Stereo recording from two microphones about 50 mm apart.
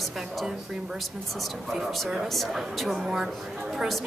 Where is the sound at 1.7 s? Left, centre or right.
Centre.